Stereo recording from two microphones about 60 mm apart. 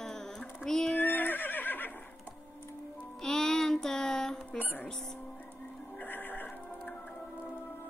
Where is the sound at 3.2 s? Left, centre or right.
Centre.